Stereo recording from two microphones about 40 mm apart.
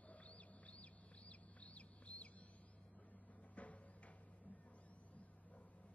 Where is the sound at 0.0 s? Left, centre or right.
Left.